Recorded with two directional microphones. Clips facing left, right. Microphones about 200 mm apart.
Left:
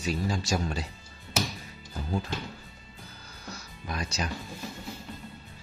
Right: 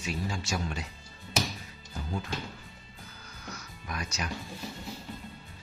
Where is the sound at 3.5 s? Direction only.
30° left (ahead or behind).